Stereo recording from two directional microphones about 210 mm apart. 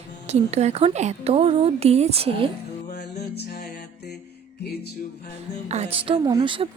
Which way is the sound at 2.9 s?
50° left (ahead or behind).